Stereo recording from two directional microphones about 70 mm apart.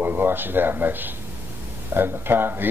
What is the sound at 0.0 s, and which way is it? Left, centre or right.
A man's voice, right.